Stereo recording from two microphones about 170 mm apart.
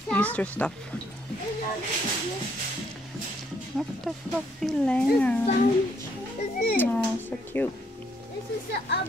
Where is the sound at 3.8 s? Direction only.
5° right (ahead or behind).